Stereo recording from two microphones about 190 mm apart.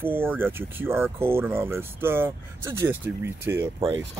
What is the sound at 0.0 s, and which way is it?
Speech, 10° right (ahead or behind).